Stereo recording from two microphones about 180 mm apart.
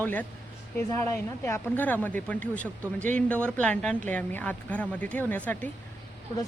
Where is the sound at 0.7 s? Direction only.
10° left (ahead or behind).